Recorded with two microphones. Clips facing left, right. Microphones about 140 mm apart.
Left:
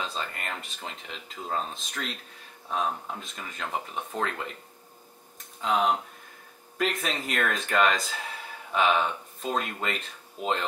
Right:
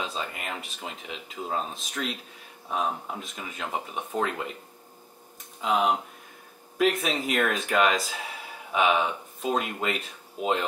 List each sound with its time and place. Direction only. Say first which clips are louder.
0.0 s speech: right 1 dB; 5° right (ahead or behind)
5.6 s speech: right 1 dB; 5° right (ahead or behind)